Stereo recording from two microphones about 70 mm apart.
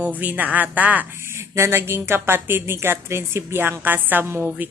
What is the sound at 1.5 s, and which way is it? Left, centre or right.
A woman's voice, right.